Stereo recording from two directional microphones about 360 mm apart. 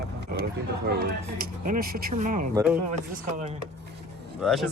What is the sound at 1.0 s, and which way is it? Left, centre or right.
Speech, right.